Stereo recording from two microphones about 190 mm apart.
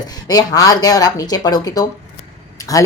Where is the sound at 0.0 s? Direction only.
20° left (ahead or behind).